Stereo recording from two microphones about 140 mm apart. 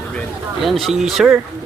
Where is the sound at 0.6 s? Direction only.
Centre (ahead or behind).